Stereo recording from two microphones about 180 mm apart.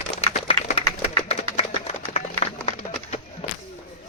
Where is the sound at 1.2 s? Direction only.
40° left (ahead or behind).